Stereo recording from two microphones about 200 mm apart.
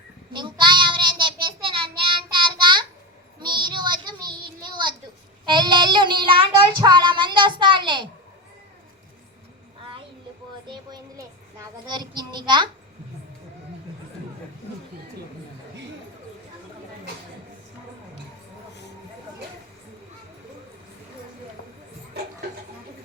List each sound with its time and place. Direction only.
0.3 s child singing: 25° right (ahead or behind)
10.7 s child singing: 20° right (ahead or behind)